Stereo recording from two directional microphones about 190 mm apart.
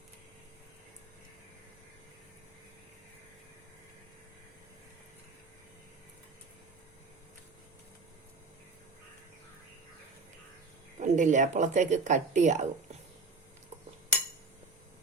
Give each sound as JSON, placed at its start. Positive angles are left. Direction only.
{"t": 11.0, "sound": "speech", "side_deg": -40}